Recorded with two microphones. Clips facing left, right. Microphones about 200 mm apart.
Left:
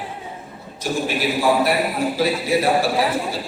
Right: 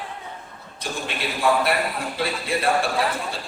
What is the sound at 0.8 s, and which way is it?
A man's voice, 5° left (ahead or behind).